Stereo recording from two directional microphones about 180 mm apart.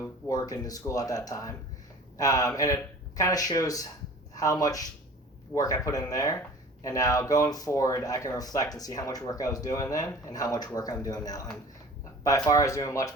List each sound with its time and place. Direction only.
0.0 s speech: 20° left (ahead or behind)